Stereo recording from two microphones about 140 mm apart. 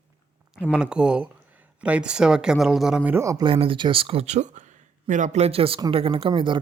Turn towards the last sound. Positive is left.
turn(degrees=-35)  # may be behind; listen again after turning